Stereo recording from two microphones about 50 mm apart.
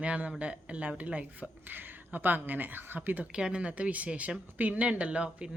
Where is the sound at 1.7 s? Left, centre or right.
Right.